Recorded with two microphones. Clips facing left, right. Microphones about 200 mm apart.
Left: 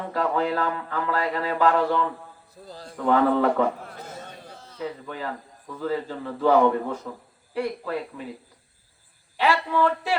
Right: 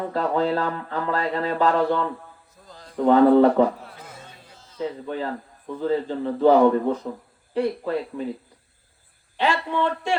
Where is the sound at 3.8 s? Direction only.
40° left (ahead or behind).